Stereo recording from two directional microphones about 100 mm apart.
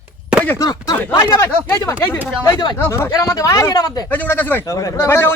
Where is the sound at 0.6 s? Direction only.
40° left (ahead or behind).